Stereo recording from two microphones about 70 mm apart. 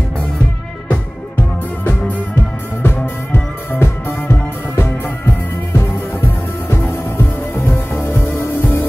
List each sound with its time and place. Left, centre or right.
1.9 s music: left